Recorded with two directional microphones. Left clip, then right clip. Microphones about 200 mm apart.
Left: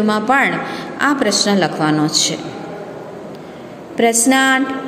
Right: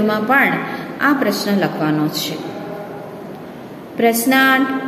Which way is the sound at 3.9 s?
30° left (ahead or behind).